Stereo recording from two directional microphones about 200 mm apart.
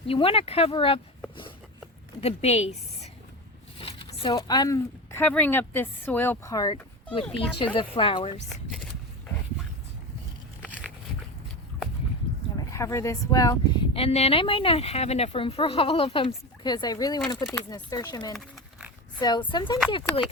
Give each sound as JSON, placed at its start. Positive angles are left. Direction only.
{"t": 0.1, "sound": "speech", "side_deg": 30}
{"t": 2.2, "sound": "a woman's voice", "side_deg": 30}
{"t": 12.5, "sound": "speech", "side_deg": 15}
{"t": 13.9, "sound": "speech", "side_deg": 30}